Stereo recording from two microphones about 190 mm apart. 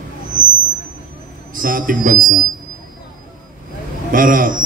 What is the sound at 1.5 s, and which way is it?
Speech, 45° right (ahead or behind).